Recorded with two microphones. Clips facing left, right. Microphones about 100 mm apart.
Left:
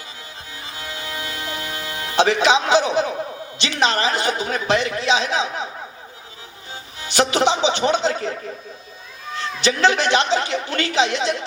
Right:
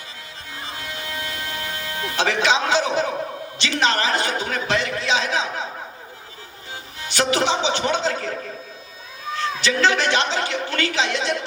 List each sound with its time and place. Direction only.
0.8 s music: 25° left (ahead or behind)
2.4 s a man's voice: 20° left (ahead or behind)
7.0 s a man's voice: 25° left (ahead or behind)
9.6 s a man's voice: 20° left (ahead or behind)